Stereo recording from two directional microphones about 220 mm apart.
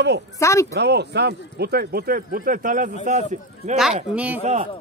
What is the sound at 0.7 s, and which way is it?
A man's voice, 50° right (ahead or behind).